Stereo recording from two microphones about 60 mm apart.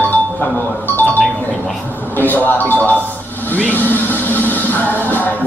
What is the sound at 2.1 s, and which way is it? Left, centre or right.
Music, left.